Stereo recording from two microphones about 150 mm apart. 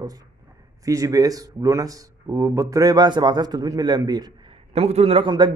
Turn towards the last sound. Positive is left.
turn(degrees=-35)  # may be behind; listen again after turning